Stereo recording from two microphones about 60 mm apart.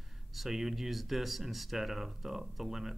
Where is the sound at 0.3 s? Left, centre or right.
Centre.